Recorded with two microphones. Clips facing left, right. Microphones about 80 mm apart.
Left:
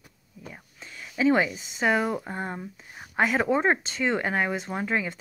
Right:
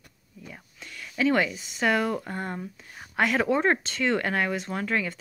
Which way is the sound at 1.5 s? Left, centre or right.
Centre.